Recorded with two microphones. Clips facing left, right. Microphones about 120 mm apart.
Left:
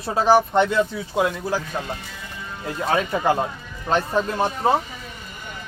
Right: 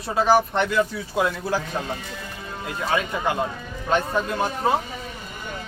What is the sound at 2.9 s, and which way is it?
Speech, 40° left (ahead or behind).